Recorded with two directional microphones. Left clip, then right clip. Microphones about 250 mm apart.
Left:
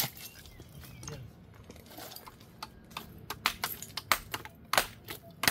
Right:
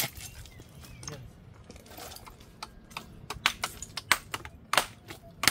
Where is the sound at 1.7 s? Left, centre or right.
Centre.